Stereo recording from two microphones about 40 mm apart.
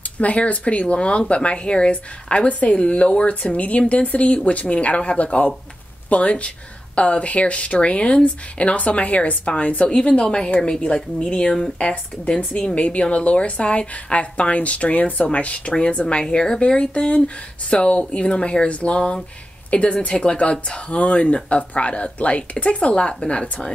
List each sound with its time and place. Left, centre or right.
0.2 s speech: left